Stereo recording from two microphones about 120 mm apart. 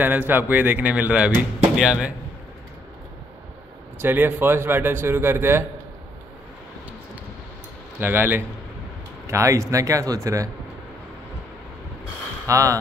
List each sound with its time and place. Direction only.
0.0 s speech: 15° right (ahead or behind)
4.0 s speech: 15° right (ahead or behind)
8.0 s speech: 15° right (ahead or behind)
12.4 s speech: 25° right (ahead or behind)